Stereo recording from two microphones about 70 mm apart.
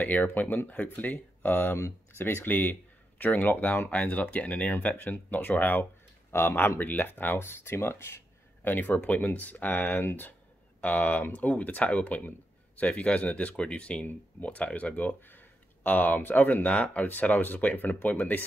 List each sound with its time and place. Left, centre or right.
0.0 s speech: left
1.8 s speech: left
2.2 s speech: left
8.6 s speech: left